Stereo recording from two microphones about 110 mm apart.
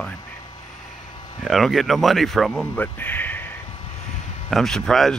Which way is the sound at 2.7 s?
15° left (ahead or behind).